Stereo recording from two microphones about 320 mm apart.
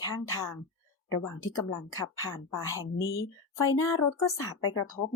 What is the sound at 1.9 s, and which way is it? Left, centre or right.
Speech, centre.